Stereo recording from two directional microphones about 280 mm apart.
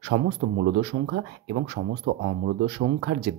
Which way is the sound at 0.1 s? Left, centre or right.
Right.